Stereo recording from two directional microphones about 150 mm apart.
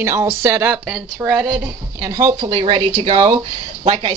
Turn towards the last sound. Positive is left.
turn(degrees=-35)  # may be behind; listen again after turning